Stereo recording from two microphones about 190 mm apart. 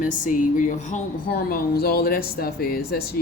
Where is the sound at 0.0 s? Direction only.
45° left (ahead or behind).